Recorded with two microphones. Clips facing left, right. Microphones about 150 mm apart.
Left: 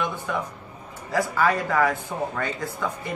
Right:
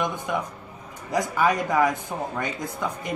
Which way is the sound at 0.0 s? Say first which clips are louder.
Right 1 dB; 15° right (ahead or behind).